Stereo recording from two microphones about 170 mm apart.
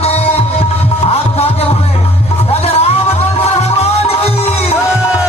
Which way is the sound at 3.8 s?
35° left (ahead or behind).